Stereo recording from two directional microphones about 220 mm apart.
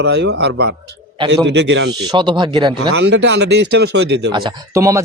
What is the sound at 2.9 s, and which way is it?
Speech, 50° right (ahead or behind).